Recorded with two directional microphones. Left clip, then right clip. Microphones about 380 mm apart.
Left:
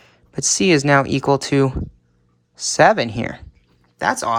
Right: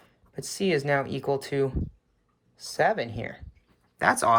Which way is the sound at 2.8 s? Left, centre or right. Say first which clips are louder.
Left 11 dB; centre.